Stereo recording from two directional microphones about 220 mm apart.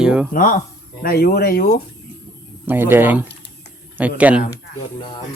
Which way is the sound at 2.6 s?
10° right (ahead or behind).